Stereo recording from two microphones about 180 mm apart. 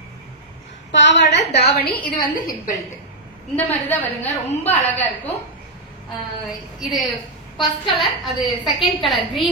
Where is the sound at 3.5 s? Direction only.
10° left (ahead or behind).